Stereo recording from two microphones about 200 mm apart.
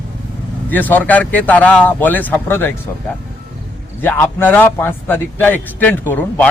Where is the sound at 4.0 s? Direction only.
10° left (ahead or behind).